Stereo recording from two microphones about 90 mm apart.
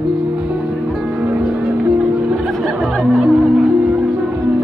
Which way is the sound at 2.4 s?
Centre (ahead or behind).